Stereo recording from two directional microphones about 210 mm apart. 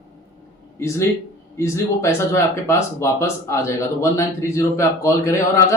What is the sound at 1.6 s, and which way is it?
A man's voice, 15° left (ahead or behind).